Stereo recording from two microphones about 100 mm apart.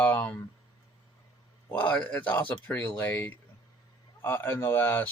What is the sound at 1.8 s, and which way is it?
Speech, 15° left (ahead or behind).